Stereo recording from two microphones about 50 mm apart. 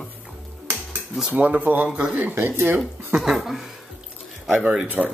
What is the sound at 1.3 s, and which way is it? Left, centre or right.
Speech, right.